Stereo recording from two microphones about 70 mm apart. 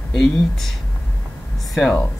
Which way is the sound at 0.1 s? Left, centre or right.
Centre.